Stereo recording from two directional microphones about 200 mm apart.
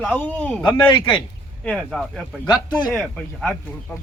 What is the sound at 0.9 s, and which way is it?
Speech, 25° left (ahead or behind).